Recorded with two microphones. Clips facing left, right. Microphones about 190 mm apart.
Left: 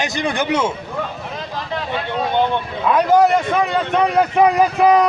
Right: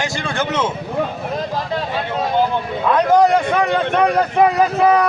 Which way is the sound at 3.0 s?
5° left (ahead or behind).